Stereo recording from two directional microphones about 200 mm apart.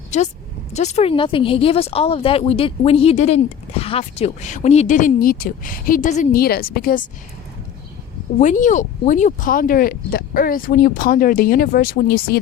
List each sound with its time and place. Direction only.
0.1 s speech: 35° left (ahead or behind)
8.4 s speech: 40° left (ahead or behind)